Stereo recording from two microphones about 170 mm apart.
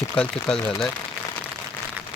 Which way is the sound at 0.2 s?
5° left (ahead or behind).